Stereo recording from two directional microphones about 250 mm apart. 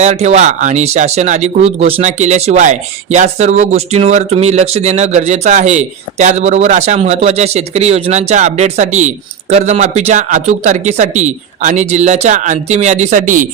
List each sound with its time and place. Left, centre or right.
0.0 s speech: right